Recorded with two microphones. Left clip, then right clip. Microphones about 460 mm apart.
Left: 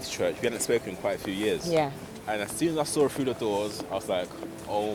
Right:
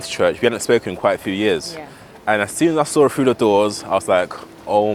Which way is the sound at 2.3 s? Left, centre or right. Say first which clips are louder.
Right 12 dB; right.